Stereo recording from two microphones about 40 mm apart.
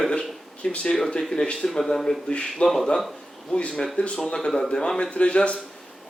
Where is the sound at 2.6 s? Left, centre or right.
Centre.